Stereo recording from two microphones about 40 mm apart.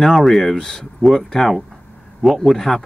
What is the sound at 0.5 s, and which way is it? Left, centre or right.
Speech, centre.